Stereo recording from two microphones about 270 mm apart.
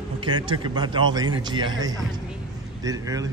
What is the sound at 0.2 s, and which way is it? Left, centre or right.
A man's voice, centre.